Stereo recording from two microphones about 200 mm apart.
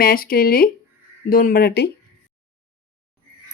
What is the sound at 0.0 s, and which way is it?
Speech, 45° left (ahead or behind).